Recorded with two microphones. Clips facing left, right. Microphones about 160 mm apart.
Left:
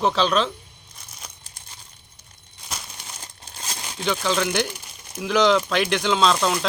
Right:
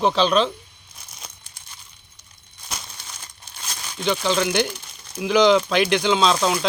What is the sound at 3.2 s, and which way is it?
Crumpling, 40° left (ahead or behind).